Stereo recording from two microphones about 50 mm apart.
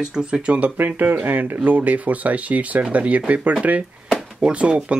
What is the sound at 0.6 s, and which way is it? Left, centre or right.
Speech, right.